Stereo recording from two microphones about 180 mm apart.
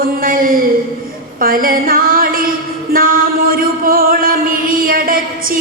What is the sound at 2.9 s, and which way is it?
Music, 50° right (ahead or behind).